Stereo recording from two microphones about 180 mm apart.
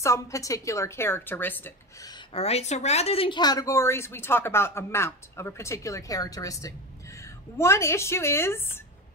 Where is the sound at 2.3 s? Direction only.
35° left (ahead or behind).